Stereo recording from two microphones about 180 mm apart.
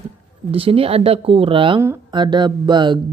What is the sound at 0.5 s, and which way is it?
Speech, 30° right (ahead or behind).